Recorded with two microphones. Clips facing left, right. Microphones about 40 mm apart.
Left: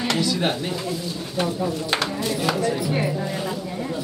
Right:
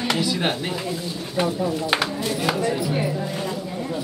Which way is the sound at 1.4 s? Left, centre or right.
Centre.